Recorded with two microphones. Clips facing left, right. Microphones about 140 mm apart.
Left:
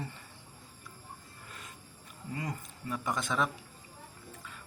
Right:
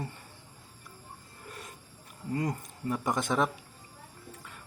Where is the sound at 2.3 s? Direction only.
45° right (ahead or behind).